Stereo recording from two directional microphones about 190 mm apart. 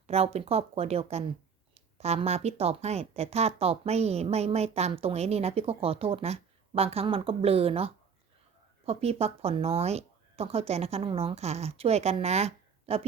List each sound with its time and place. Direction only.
0.1 s a woman's voice: 35° right (ahead or behind)